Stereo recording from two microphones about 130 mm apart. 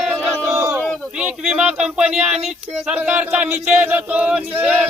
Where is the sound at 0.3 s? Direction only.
5° right (ahead or behind).